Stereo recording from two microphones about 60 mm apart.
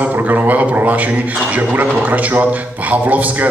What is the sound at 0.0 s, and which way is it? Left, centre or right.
A man's voice, right.